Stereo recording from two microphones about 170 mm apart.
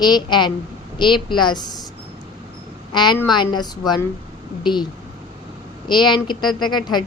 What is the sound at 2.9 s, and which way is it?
A woman's voice, 25° left (ahead or behind).